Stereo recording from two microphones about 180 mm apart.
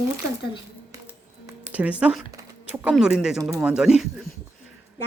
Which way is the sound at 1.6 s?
10° right (ahead or behind).